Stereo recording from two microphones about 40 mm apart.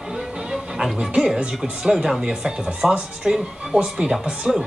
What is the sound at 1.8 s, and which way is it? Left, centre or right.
Speech, right.